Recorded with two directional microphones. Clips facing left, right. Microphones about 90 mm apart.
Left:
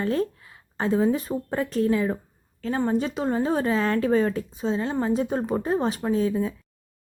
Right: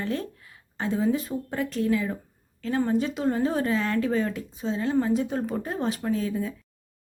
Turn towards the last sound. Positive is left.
turn(degrees=25)  # may be behind; listen again after turning